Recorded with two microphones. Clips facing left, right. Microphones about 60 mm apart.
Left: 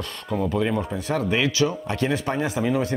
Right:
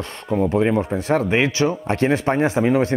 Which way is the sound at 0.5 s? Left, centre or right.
Right.